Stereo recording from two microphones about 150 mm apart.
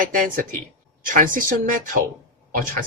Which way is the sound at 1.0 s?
65° right (ahead or behind).